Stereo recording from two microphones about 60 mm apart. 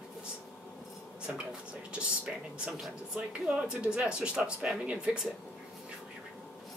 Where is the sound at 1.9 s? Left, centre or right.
Centre.